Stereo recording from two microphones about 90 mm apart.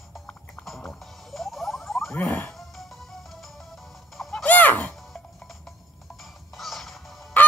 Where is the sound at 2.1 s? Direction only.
20° left (ahead or behind).